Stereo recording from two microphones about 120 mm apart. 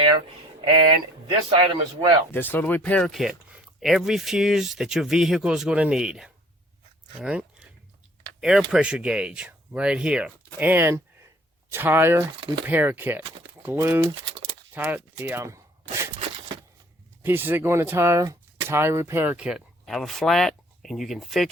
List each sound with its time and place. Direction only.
1.5 s a man's voice: 45° right (ahead or behind)
2.3 s speech: 15° left (ahead or behind)
3.1 s speech: centre (ahead or behind); by 16.0 s 25° right (ahead or behind)
17.2 s speech: 15° right (ahead or behind); by 21.5 s centre (ahead or behind)